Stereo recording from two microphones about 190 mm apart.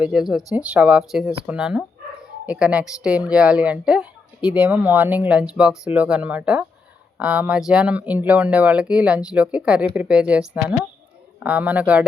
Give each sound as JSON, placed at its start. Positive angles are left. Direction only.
{"t": 0.0, "sound": "speech", "side_deg": -5}